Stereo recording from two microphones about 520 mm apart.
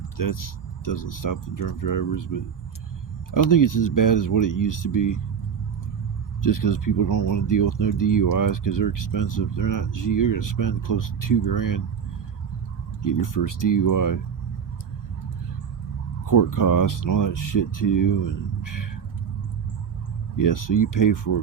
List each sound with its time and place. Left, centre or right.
0.2 s speech: left
3.5 s speech: left
6.4 s speech: left
13.0 s speech: left
16.2 s speech: left
20.3 s speech: left